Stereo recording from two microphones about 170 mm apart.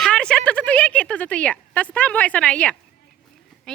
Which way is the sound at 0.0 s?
5° left (ahead or behind).